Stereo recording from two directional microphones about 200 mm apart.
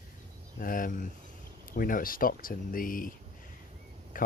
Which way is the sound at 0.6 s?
45° left (ahead or behind).